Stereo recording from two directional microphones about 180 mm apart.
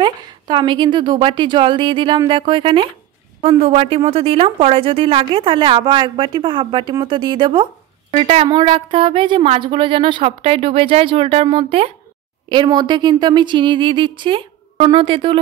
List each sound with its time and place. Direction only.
0.0 s a woman's voice: 25° right (ahead or behind)